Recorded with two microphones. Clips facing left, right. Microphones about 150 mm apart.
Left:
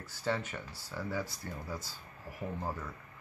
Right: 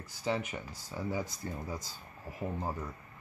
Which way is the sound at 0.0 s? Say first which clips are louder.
Right 1 dB; 15° right (ahead or behind).